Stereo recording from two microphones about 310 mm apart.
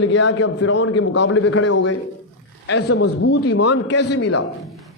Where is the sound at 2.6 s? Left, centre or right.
Left.